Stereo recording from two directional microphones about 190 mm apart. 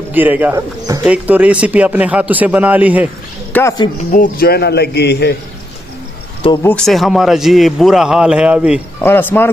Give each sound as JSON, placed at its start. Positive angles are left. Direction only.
{"t": 0.1, "sound": "speech", "side_deg": -10}
{"t": 3.5, "sound": "speech", "side_deg": 20}
{"t": 4.1, "sound": "speech", "side_deg": 50}
{"t": 6.6, "sound": "a man's voice", "side_deg": 5}
{"t": 9.0, "sound": "speech", "side_deg": 10}